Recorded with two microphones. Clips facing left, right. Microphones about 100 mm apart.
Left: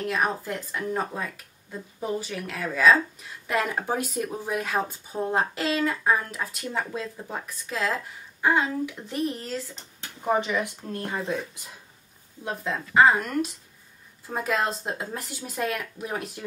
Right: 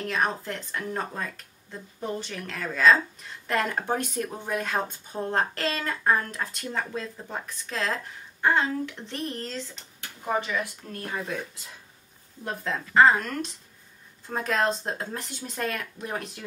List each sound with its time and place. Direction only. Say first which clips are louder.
0.0 s speech: left 1 dB; 5° left (ahead or behind)
10.2 s speech: left 3 dB; 20° left (ahead or behind)
11.6 s speech: left 1 dB; 15° left (ahead or behind)
12.4 s speech: left 1 dB; 5° left (ahead or behind)